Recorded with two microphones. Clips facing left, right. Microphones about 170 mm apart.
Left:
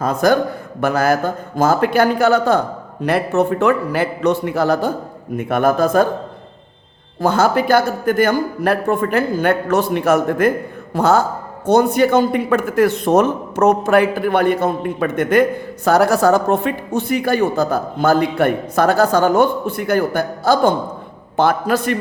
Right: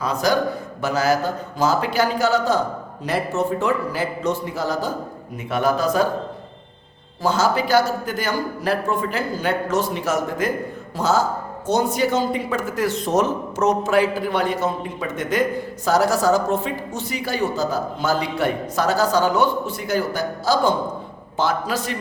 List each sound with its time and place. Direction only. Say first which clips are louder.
0.0 s a man's voice: left 5 dB; 50° left (ahead or behind)
7.2 s a man's voice: left 5 dB; 55° left (ahead or behind)